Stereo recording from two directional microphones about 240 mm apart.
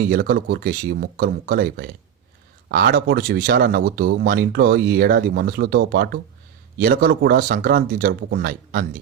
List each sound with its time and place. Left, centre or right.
0.1 s speech: right